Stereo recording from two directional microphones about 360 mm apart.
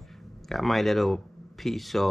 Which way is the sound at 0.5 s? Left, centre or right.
Centre.